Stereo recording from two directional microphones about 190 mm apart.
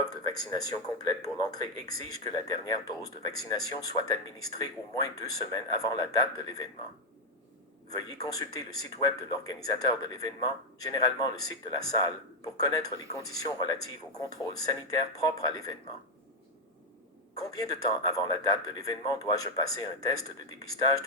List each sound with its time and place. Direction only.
0.0 s a sound: 20° left (ahead or behind)
1.2 s a man's voice: 20° left (ahead or behind)
7.9 s a man's voice: 20° left (ahead or behind)
17.3 s a man's voice: 20° left (ahead or behind)